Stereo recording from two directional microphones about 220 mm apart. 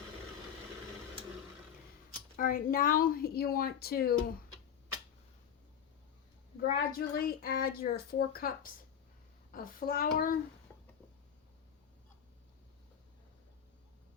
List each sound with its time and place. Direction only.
2.3 s a woman's voice: 40° left (ahead or behind)
6.6 s a woman's voice: 45° left (ahead or behind)